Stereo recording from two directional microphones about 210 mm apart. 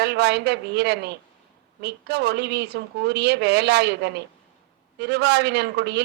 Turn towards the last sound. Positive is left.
turn(degrees=-55)  # may be behind; listen again after turning